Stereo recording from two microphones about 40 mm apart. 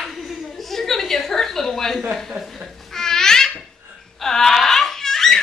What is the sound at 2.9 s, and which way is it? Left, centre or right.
Baby laughter, centre.